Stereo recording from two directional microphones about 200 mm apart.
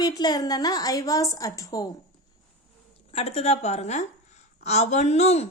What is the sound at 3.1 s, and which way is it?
A woman's voice, 30° left (ahead or behind).